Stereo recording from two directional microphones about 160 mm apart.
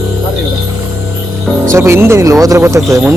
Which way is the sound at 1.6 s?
15° right (ahead or behind).